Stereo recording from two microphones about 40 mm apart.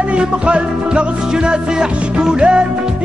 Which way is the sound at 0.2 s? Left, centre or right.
Right.